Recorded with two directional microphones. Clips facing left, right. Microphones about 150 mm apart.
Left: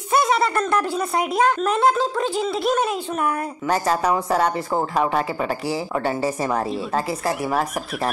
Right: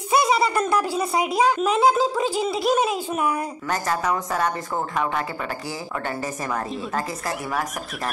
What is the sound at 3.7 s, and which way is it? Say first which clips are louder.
A woman's voice: left 5 dB; 30° left (ahead or behind).